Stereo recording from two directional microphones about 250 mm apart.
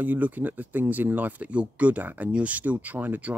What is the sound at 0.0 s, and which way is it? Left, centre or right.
Speech, centre.